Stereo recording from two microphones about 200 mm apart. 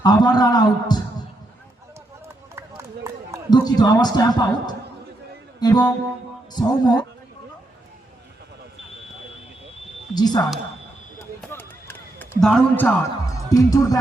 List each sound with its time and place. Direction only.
0.0 s a man's voice: 20° left (ahead or behind)
2.2 s run: 15° right (ahead or behind)
3.5 s a man's voice: 20° left (ahead or behind)
5.5 s music: 20° left (ahead or behind)
6.5 s a man's voice: 20° left (ahead or behind)
10.2 s a man's voice: 20° left (ahead or behind)
11.2 s run: 10° left (ahead or behind)
13.5 s speech: 15° left (ahead or behind)